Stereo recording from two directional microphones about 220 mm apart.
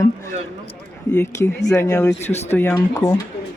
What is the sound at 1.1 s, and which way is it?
Speech, 10° left (ahead or behind).